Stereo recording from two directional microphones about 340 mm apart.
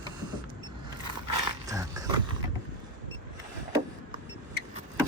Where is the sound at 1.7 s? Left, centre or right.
Centre.